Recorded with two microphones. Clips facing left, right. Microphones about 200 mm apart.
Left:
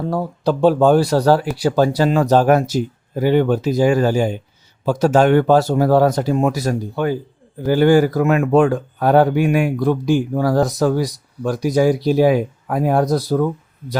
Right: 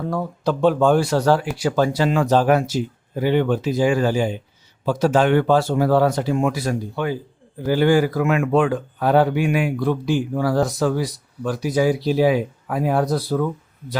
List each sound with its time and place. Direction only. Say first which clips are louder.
0.1 s speech: left 3 dB; 35° left (ahead or behind)